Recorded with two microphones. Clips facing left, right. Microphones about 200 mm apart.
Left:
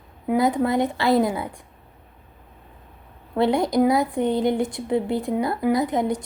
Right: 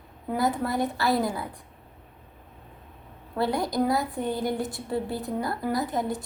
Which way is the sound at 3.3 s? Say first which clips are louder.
Left 6 dB; 20° left (ahead or behind).